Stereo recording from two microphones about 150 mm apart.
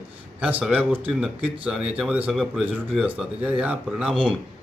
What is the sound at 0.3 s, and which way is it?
Speech, 10° right (ahead or behind).